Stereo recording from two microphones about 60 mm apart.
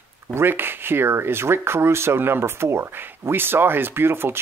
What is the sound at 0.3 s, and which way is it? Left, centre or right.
Speech, right.